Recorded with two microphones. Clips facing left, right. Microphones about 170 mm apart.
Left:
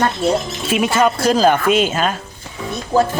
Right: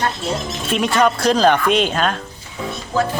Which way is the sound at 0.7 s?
5° left (ahead or behind).